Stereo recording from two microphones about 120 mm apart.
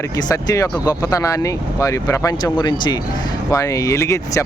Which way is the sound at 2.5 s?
40° left (ahead or behind).